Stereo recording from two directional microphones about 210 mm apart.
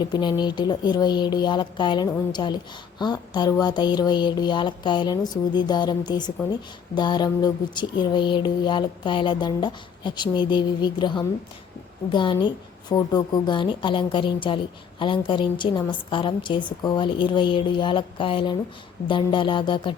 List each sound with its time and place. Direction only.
0.0 s speech: 20° left (ahead or behind)